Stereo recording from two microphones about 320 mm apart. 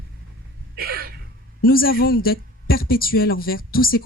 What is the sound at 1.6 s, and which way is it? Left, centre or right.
Speech, left.